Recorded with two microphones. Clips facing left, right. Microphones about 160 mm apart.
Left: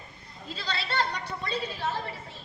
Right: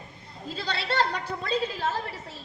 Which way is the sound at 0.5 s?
60° right (ahead or behind).